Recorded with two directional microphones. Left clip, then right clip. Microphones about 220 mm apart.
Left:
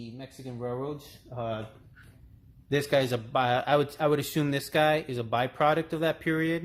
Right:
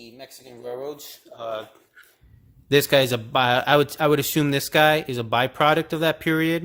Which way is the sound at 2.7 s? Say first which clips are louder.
Right 8 dB; 40° right (ahead or behind).